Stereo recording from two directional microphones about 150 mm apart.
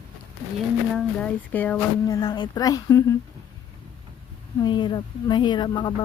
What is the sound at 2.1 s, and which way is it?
Speech, 30° left (ahead or behind).